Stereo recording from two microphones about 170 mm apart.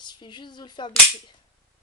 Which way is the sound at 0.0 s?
25° left (ahead or behind).